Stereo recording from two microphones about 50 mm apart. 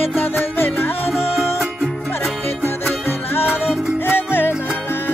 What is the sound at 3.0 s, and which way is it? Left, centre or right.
Music, left.